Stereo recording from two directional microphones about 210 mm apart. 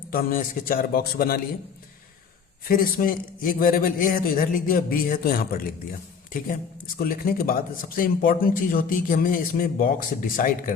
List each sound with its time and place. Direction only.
0.1 s a man's voice: 40° left (ahead or behind)
2.6 s a man's voice: 45° left (ahead or behind)
7.0 s speech: 45° left (ahead or behind)